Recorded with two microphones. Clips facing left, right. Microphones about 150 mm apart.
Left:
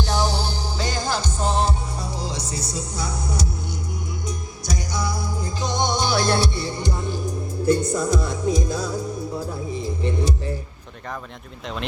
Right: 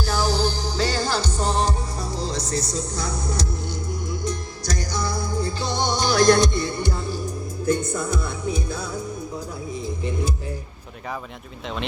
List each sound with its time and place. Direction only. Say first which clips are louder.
0.1 s music: right 1 dB; 15° left (ahead or behind)
7.7 s music: left 3 dB; 35° left (ahead or behind)